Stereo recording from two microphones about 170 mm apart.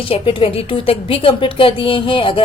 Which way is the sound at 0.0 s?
30° left (ahead or behind).